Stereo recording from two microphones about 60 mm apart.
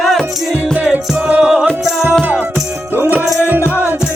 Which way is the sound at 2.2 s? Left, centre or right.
Right.